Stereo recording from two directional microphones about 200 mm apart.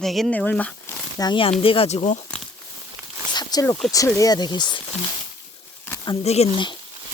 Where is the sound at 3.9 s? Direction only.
15° left (ahead or behind).